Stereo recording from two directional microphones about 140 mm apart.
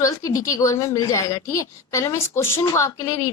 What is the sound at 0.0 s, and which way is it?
A woman's voice, 25° left (ahead or behind).